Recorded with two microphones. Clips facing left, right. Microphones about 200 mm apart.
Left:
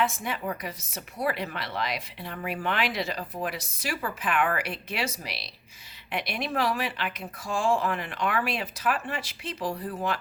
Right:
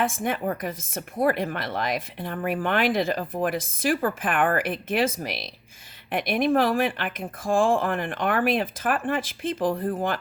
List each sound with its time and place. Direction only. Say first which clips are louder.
0.0 s speech: right 4 dB; 50° right (ahead or behind)